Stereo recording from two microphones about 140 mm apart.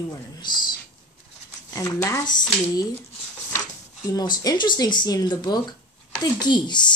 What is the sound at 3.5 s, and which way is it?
Speech, 25° left (ahead or behind).